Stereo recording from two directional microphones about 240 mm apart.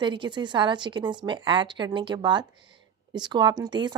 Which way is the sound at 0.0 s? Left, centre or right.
Centre.